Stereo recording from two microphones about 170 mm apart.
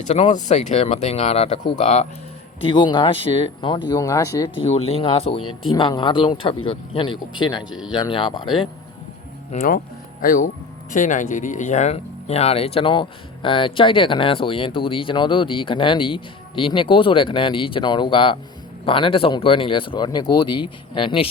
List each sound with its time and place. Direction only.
0.0 s speech: 45° left (ahead or behind)
2.6 s speech: 30° left (ahead or behind)
4.6 s speech: 35° left (ahead or behind)
9.5 s speech: 55° left (ahead or behind); by 21.2 s 30° left (ahead or behind)